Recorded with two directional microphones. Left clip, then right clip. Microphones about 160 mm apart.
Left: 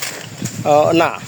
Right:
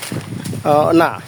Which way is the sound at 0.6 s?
40° right (ahead or behind).